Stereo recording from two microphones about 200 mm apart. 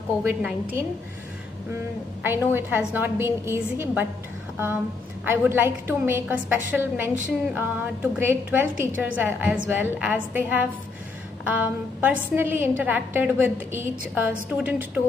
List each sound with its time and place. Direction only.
0.2 s a woman's voice: 5° right (ahead or behind)
2.2 s a woman's voice: 10° right (ahead or behind)
5.2 s a woman's voice: 10° right (ahead or behind)